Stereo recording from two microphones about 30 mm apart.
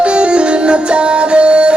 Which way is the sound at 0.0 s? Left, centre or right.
Right.